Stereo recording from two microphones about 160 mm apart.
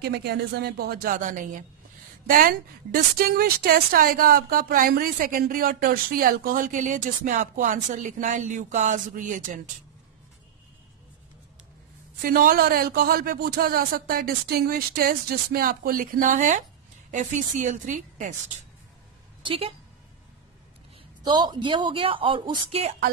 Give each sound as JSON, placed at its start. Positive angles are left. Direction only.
{"t": 0.0, "sound": "a woman's voice", "side_deg": -90}
{"t": 12.2, "sound": "a man's voice", "side_deg": -65}
{"t": 19.4, "sound": "a woman's voice", "side_deg": -35}
{"t": 21.2, "sound": "a woman's voice", "side_deg": -25}